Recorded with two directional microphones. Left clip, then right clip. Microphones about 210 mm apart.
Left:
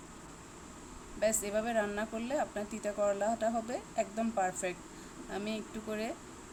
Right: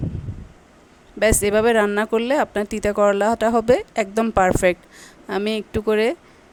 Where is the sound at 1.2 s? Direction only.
50° right (ahead or behind).